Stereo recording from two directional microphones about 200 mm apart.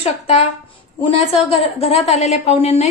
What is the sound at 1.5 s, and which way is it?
Speech, 30° left (ahead or behind).